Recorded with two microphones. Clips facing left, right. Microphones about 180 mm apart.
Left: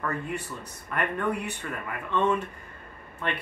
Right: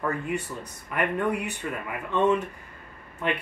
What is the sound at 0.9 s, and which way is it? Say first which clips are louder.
Speech: right 2 dB; 10° right (ahead or behind).